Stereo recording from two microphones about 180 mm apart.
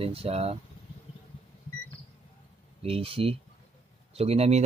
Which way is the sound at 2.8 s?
30° right (ahead or behind).